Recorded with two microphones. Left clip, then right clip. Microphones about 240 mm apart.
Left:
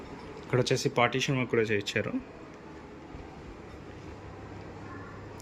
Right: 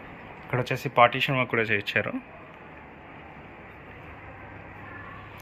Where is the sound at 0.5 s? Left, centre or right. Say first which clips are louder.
Right 3 dB; centre.